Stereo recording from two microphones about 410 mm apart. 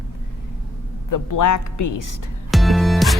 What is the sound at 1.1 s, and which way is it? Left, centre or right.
Speech, left.